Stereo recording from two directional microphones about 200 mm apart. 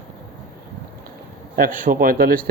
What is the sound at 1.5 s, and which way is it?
Speech, 45° right (ahead or behind).